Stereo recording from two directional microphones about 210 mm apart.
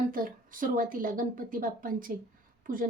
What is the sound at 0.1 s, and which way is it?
Speech, 40° right (ahead or behind).